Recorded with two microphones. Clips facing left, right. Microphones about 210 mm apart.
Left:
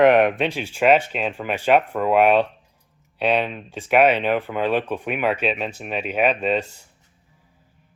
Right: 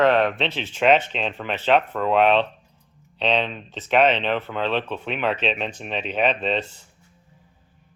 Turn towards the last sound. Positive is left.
turn(degrees=10)  # may be behind; listen again after turning